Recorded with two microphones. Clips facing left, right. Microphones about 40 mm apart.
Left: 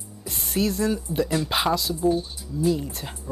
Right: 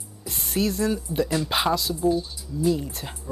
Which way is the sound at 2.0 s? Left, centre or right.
Left.